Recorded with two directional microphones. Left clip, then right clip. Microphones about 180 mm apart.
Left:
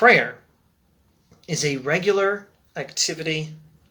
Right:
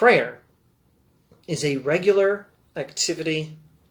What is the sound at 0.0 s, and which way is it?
Speech, 10° left (ahead or behind).